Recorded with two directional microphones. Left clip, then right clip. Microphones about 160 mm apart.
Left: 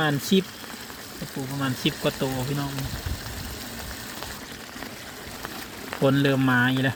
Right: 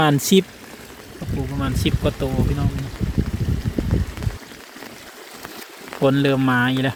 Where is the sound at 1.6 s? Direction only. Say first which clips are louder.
Right 2 dB; 15° right (ahead or behind).